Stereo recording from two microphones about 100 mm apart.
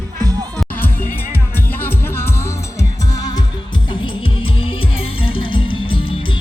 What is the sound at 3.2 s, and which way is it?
Music, 40° left (ahead or behind).